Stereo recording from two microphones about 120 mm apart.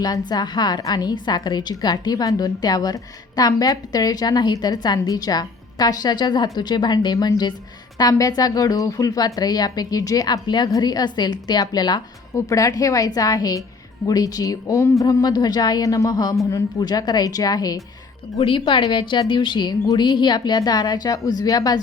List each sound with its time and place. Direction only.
0.0 s a woman's voice: 35° left (ahead or behind)
18.3 s a woman's voice: 45° left (ahead or behind); by 21.8 s 30° left (ahead or behind)